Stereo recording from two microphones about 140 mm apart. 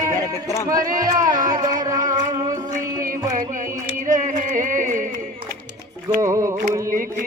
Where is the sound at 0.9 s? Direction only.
25° right (ahead or behind).